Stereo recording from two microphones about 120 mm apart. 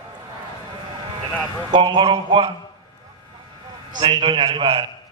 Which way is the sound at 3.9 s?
45° right (ahead or behind).